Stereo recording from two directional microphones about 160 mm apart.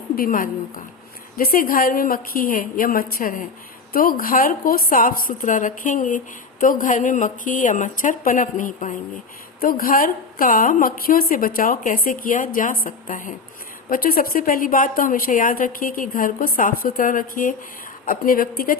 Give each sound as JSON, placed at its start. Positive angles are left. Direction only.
{"t": 0.2, "sound": "a woman's voice", "side_deg": 60}
{"t": 9.6, "sound": "a woman's voice", "side_deg": 65}